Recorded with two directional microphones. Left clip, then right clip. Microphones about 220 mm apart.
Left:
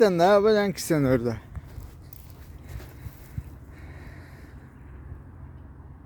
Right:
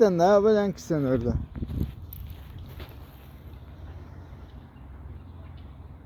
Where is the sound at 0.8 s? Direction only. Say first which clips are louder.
Left 3 dB; 35° left (ahead or behind).